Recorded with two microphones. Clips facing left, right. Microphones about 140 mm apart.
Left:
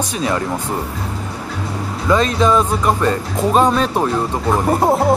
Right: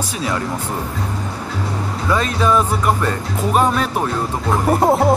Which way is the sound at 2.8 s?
20° left (ahead or behind).